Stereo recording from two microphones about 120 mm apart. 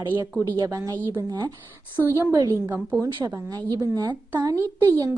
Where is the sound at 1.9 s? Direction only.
25° right (ahead or behind).